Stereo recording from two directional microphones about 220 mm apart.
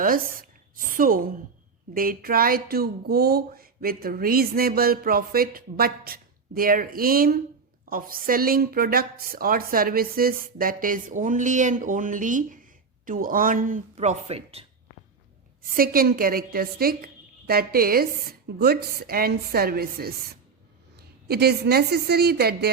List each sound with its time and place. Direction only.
0.0 s speech: 40° right (ahead or behind)
15.6 s a woman's voice: 40° right (ahead or behind)